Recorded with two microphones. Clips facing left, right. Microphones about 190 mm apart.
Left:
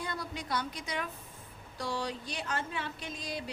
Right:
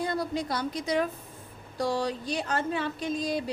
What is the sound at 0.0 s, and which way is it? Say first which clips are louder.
A woman's voice: right 10 dB; 35° right (ahead or behind).